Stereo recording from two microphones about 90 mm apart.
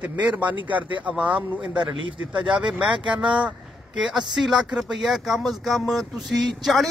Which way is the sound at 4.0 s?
5° right (ahead or behind).